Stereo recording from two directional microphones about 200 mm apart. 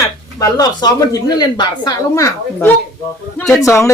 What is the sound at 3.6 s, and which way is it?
Speech, 15° left (ahead or behind).